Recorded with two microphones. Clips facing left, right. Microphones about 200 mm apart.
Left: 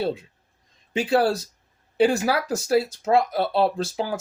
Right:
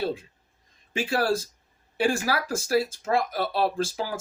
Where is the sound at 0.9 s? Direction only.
25° left (ahead or behind).